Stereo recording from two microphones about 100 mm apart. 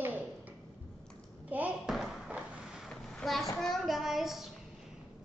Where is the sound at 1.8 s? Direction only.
5° right (ahead or behind).